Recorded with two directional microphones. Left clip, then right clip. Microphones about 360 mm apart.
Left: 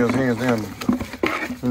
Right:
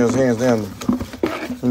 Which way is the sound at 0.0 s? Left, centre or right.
Centre.